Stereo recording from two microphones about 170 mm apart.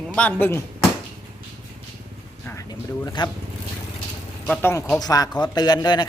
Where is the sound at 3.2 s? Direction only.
25° left (ahead or behind).